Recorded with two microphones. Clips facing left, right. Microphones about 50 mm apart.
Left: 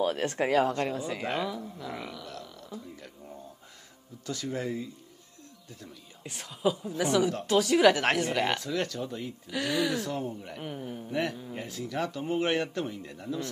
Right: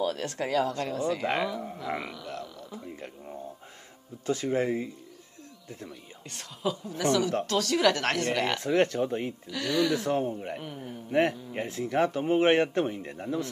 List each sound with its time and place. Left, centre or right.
0.0 s speech: left
0.9 s speech: centre
2.6 s a man's voice: right
6.2 s speech: centre
8.5 s a man's voice: right
9.5 s speech: centre
9.9 s a man's voice: right